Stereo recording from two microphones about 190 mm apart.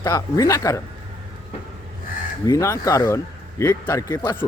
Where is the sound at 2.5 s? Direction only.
15° left (ahead or behind).